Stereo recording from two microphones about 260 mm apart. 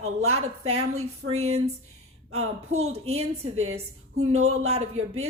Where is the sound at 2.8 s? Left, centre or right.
Right.